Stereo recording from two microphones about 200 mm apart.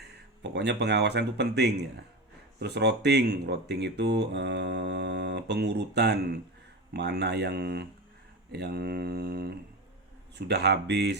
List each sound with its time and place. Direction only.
0.4 s speech: 60° right (ahead or behind)